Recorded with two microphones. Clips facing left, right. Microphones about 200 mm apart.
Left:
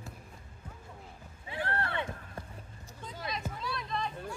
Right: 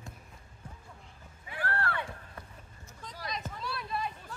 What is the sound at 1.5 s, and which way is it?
Run, 20° left (ahead or behind).